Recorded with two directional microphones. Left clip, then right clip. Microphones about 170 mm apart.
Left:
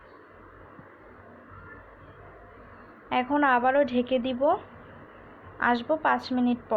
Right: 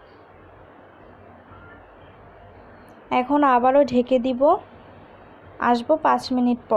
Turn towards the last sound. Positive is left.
turn(degrees=-50)  # may be behind; listen again after turning